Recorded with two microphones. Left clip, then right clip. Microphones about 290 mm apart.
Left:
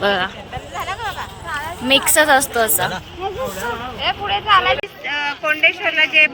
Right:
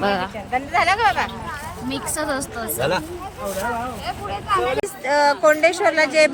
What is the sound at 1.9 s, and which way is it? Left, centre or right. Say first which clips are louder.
Speech: left 13 dB; centre.